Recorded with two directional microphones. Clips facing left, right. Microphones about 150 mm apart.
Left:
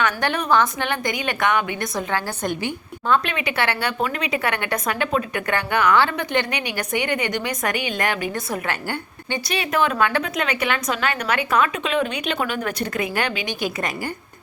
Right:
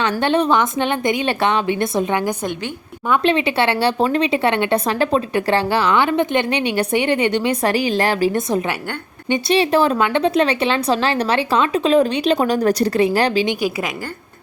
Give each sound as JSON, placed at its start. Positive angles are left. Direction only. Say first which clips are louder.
{"t": 0.0, "sound": "a woman's voice", "louder": "right 6 dB", "side_deg": -25}
{"t": 9.3, "sound": "speech", "louder": "right 8 dB", "side_deg": -30}